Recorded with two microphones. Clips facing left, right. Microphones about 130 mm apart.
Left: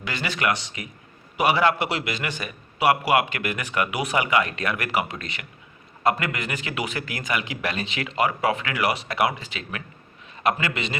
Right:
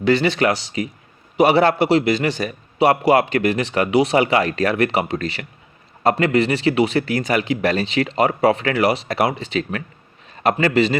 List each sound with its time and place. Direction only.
0.0 s a man's voice: 30° right (ahead or behind)